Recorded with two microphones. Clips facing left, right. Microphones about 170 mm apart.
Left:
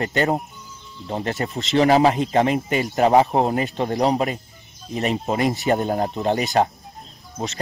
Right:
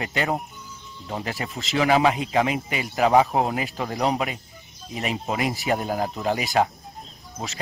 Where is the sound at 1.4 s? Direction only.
40° left (ahead or behind).